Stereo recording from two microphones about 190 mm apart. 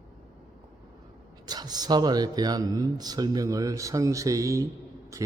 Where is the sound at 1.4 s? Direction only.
20° right (ahead or behind).